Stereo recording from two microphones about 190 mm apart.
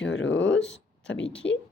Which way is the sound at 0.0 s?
70° left (ahead or behind).